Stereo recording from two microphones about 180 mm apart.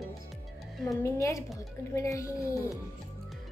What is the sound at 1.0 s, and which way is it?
A child's voice, 15° left (ahead or behind).